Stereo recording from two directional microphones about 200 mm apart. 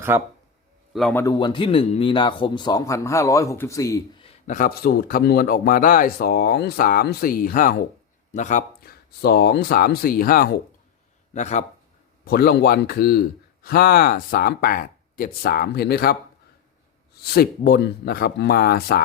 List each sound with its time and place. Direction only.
0.1 s speech: 10° right (ahead or behind)
0.9 s speech: centre (ahead or behind)
1.2 s speech: 20° left (ahead or behind)
4.2 s speech: 35° left (ahead or behind)
11.3 s speech: 35° left (ahead or behind)
12.2 s speech: 50° left (ahead or behind)
17.2 s speech: 50° left (ahead or behind)